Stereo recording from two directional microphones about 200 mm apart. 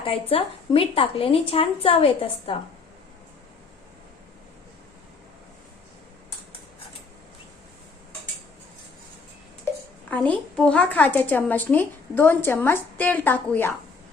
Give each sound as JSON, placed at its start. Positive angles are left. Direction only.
{"t": 0.0, "sound": "a woman's voice", "side_deg": 30}
{"t": 10.1, "sound": "a woman's voice", "side_deg": 5}